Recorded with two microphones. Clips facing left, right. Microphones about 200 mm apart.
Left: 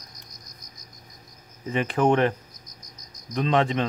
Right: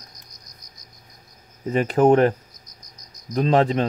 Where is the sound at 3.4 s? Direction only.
40° right (ahead or behind).